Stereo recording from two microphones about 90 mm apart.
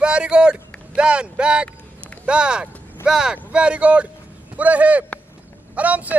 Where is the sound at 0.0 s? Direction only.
10° right (ahead or behind).